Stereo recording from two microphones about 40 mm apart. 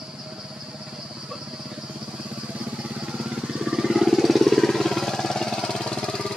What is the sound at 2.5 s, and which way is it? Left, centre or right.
Vehicle, right.